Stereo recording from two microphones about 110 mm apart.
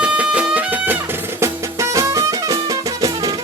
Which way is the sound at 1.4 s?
30° right (ahead or behind).